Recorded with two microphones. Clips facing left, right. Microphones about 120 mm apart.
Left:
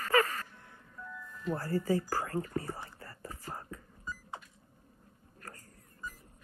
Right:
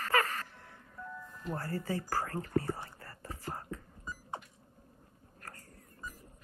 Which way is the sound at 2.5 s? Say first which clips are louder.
Right 4 dB; 40° right (ahead or behind).